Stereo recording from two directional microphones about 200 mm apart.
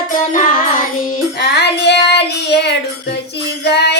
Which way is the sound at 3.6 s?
55° left (ahead or behind).